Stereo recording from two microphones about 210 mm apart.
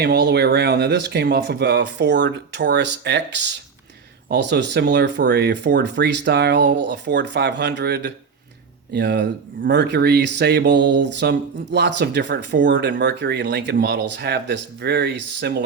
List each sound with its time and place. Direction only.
0.0 s speech: 50° right (ahead or behind)